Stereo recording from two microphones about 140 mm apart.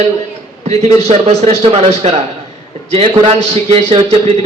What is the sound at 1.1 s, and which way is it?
A man's voice, 50° right (ahead or behind).